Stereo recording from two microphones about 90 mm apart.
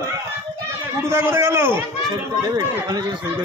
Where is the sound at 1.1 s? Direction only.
30° right (ahead or behind).